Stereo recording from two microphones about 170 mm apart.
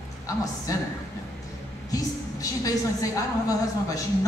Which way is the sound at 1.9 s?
20° left (ahead or behind).